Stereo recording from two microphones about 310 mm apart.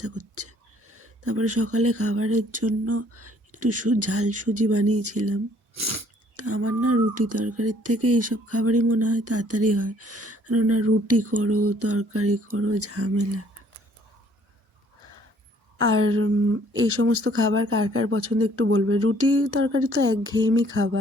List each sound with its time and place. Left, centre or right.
0.0 s speech: right
15.8 s speech: right
20.5 s a sound: right